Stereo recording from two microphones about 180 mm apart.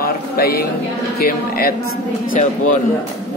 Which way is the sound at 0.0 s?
55° left (ahead or behind).